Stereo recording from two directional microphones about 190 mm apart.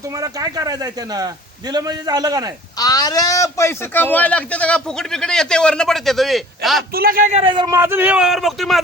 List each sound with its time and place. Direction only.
0.2 s speech: 20° right (ahead or behind)
2.7 s a man's voice: 20° left (ahead or behind); by 6.8 s centre (ahead or behind)
6.9 s a man's voice: 50° right (ahead or behind); by 8.8 s centre (ahead or behind)